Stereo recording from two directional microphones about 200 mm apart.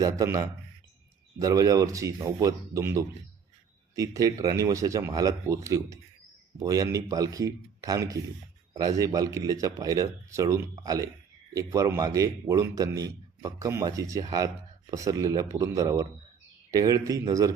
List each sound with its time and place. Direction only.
0.0 s a man's voice: 15° right (ahead or behind)